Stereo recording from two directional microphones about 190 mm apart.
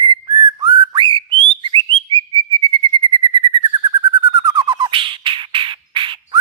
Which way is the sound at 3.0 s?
25° right (ahead or behind).